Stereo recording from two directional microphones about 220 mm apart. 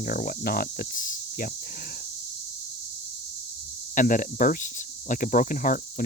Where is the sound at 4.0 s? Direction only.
35° left (ahead or behind).